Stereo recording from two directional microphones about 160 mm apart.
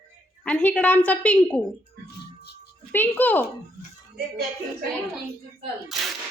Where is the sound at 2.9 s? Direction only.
10° left (ahead or behind).